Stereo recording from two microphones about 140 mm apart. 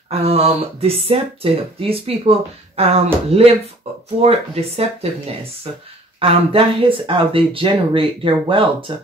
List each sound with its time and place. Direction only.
0.1 s speech: 45° right (ahead or behind)
6.1 s speech: 40° right (ahead or behind)